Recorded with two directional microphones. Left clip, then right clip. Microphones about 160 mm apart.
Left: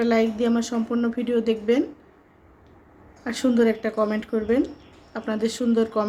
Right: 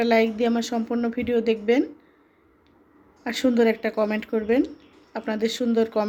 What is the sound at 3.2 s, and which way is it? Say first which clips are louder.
Speech: even; 15° right (ahead or behind).